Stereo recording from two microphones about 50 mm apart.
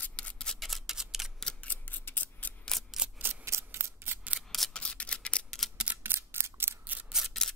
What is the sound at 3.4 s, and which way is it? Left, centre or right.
Scissors, right.